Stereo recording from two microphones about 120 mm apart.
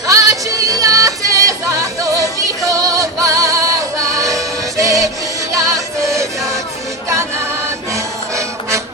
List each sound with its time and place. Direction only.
0.1 s music: 25° right (ahead or behind)
7.9 s music: 25° right (ahead or behind)